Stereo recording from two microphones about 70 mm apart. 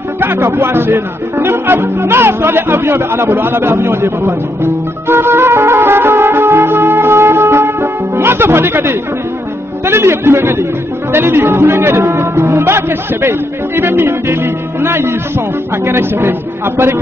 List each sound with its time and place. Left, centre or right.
0.2 s speech: right
5.0 s music: right
9.8 s speech: right